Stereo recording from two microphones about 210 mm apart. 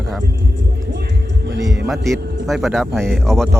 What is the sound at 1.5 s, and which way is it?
Speech, 55° right (ahead or behind).